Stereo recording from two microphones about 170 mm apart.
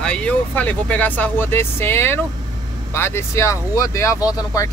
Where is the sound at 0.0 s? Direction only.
5° left (ahead or behind).